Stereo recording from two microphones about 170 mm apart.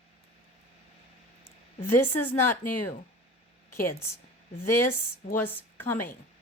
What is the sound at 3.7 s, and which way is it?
Speech, 15° left (ahead or behind).